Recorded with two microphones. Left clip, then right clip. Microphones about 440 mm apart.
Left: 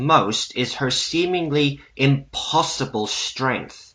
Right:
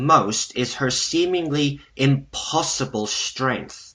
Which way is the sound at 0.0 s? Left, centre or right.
Centre.